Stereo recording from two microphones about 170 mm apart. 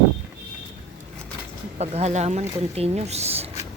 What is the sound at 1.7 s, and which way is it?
Speech, 40° right (ahead or behind).